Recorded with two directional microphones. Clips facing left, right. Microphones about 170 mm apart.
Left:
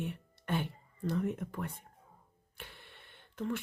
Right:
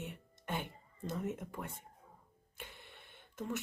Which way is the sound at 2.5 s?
15° right (ahead or behind).